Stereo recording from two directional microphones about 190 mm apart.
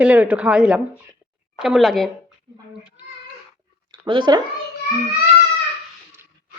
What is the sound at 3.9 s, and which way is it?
Speech, 25° right (ahead or behind).